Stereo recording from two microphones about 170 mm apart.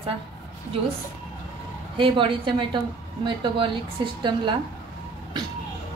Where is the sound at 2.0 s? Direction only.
30° right (ahead or behind).